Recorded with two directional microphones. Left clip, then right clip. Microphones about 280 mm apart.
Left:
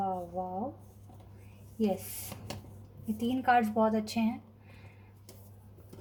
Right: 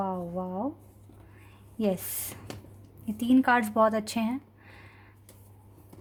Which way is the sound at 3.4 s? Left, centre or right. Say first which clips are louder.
Right 2 dB; right.